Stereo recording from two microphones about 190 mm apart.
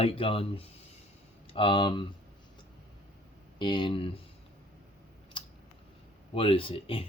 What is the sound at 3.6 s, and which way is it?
Speech, 25° left (ahead or behind).